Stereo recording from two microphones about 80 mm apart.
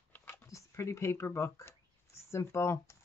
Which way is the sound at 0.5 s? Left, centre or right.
Left.